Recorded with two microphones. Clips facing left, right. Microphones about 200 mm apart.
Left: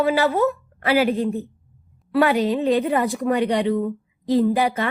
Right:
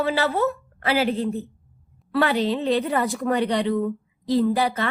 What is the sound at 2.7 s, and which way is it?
Speech, 35° right (ahead or behind).